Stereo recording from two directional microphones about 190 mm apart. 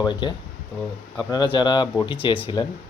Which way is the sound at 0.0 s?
25° left (ahead or behind).